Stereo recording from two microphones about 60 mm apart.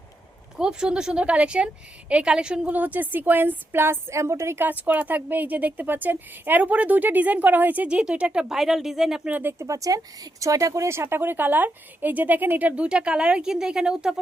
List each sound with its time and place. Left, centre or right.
0.5 s a woman's voice: centre
2.7 s speech: right
4.1 s a woman's voice: right
4.6 s a woman's voice: right
7.9 s a woman's voice: centre
9.3 s speech: right
9.6 s speech: right
10.8 s speech: right
12.8 s a woman's voice: centre